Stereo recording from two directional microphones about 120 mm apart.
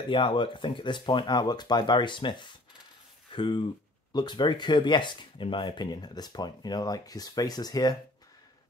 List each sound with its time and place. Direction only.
0.1 s speech: 45° left (ahead or behind)